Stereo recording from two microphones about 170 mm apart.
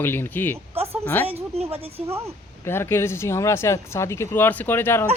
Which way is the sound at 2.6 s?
15° left (ahead or behind).